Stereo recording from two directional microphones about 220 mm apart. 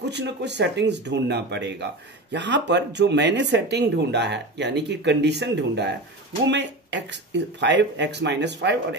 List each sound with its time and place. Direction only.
0.1 s speech: 50° right (ahead or behind)